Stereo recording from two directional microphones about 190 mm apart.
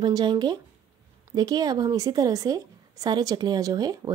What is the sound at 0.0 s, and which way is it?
A woman's voice, 25° right (ahead or behind).